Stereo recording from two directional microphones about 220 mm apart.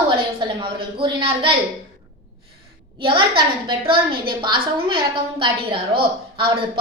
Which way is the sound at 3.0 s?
20° right (ahead or behind).